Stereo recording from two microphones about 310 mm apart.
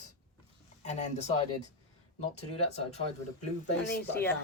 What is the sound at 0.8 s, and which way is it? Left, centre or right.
Speech, left.